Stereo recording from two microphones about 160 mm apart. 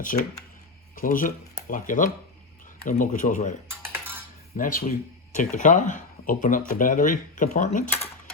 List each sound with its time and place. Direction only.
0.9 s speech: 55° left (ahead or behind)
3.7 s coin: 15° right (ahead or behind)
4.5 s speech: 60° left (ahead or behind)